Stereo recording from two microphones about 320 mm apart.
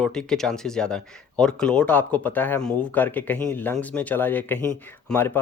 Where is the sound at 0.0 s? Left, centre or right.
Centre.